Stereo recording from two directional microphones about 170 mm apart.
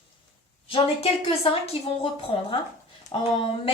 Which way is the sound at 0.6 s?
30° left (ahead or behind).